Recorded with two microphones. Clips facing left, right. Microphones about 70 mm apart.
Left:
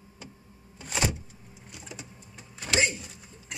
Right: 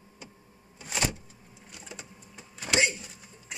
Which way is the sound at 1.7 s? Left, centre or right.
Centre.